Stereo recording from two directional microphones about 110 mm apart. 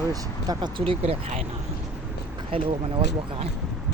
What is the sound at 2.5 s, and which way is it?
Speech, 55° right (ahead or behind).